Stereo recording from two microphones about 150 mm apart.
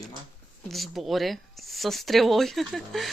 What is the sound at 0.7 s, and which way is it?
Speech, centre (ahead or behind).